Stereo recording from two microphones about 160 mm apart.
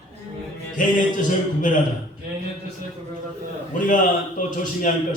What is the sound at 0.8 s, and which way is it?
Speech, 55° left (ahead or behind).